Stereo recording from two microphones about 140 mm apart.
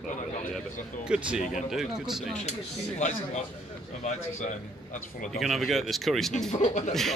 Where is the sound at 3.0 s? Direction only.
55° left (ahead or behind).